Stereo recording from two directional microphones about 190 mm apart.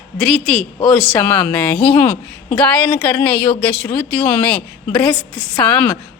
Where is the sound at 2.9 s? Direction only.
20° left (ahead or behind).